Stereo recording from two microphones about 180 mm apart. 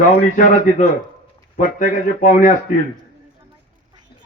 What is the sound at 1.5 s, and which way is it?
Speech, 50° left (ahead or behind).